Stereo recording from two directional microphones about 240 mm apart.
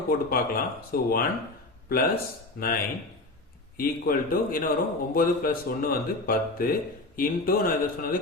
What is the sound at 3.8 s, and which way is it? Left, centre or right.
A man's voice, left.